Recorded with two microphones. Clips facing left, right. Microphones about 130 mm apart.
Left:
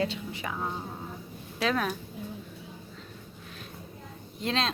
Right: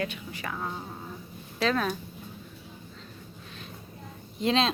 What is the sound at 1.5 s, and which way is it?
Speech, 5° left (ahead or behind).